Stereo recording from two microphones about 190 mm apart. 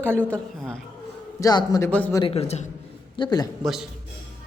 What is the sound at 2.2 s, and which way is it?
Speech, 30° left (ahead or behind).